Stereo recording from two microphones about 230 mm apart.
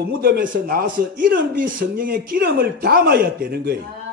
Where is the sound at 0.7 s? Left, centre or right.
Right.